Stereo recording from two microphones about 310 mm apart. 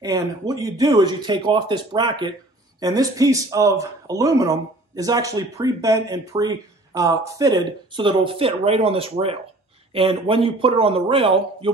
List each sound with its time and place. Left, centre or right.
0.0 s a man's voice: centre